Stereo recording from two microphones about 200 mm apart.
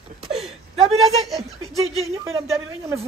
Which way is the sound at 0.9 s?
Centre (ahead or behind).